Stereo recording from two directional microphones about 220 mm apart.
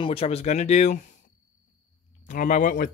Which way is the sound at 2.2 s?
35° left (ahead or behind).